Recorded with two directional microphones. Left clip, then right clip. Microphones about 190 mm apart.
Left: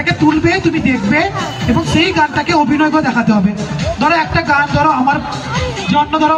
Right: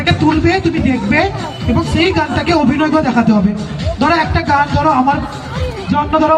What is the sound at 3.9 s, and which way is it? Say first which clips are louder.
Music: even; 25° left (ahead or behind).